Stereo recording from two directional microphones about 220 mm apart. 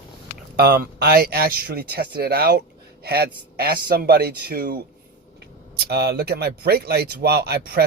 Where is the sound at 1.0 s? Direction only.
45° right (ahead or behind).